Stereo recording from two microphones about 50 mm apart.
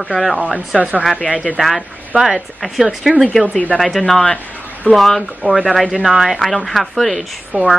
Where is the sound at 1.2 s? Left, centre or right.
Left.